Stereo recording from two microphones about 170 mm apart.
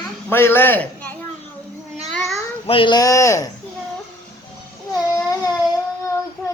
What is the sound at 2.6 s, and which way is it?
Speech, 30° left (ahead or behind).